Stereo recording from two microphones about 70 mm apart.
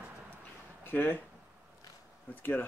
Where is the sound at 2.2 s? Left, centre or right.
Left.